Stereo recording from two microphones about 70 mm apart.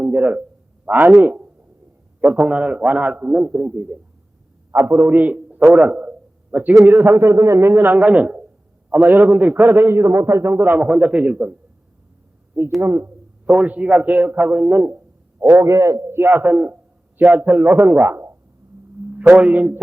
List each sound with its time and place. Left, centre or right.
0.0 s a man's voice: right
5.7 s a sound: centre
6.8 s a man's voice: right
10.6 s a man's voice: right
12.8 s a man's voice: right
13.4 s a man's voice: right
15.5 s a man's voice: right
19.1 s a man's voice: right